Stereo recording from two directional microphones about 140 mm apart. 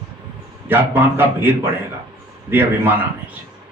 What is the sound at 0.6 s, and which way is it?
Speech, 15° right (ahead or behind).